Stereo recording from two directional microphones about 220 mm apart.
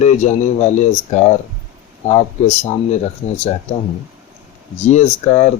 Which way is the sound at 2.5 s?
30° left (ahead or behind).